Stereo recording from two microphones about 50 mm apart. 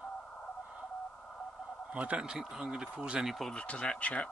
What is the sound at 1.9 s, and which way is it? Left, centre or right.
Speech, right.